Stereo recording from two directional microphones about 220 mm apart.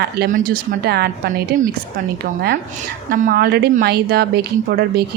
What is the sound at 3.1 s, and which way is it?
Speech, 40° right (ahead or behind).